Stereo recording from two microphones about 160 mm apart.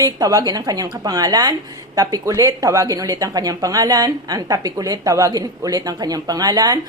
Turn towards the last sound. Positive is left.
turn(degrees=-25)  # may be behind; listen again after turning